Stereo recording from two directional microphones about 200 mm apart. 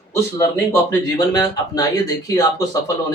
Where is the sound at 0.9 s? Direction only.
20° left (ahead or behind).